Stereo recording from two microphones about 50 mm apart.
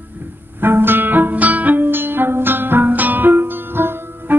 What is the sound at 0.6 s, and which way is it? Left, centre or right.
Music, right.